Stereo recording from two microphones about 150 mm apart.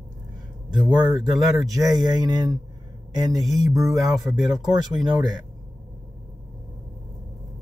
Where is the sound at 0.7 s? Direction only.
30° right (ahead or behind).